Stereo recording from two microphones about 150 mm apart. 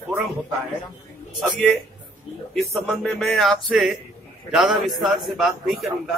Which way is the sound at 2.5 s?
5° left (ahead or behind).